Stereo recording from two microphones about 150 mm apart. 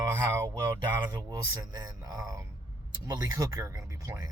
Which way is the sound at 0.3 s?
25° right (ahead or behind).